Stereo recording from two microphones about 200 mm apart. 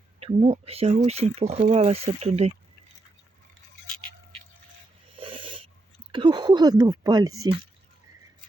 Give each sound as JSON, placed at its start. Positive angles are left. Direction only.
{"t": 0.2, "sound": "speech", "side_deg": -30}
{"t": 5.1, "sound": "cat", "side_deg": -25}
{"t": 6.1, "sound": "speech", "side_deg": -25}